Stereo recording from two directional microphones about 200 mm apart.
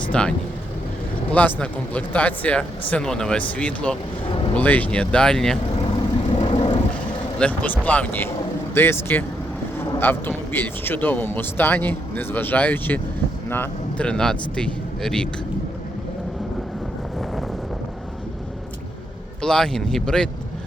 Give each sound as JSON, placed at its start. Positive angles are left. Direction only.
{"t": 0.1, "sound": "a man's voice", "side_deg": 5}
{"t": 4.3, "sound": "a sound", "side_deg": 25}
{"t": 4.5, "sound": "a man's voice", "side_deg": 10}
{"t": 6.3, "sound": "vehicle", "side_deg": 30}
{"t": 7.3, "sound": "a man's voice", "side_deg": 5}
{"t": 19.4, "sound": "a man's voice", "side_deg": 5}